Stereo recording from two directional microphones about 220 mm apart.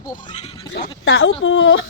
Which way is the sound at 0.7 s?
55° left (ahead or behind).